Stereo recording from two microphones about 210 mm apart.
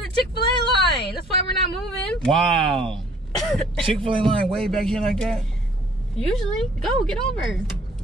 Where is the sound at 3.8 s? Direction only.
25° right (ahead or behind).